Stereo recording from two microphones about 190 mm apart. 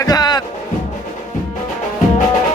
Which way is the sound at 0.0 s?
20° left (ahead or behind).